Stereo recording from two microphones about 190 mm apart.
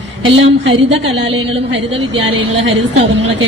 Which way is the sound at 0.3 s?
85° right.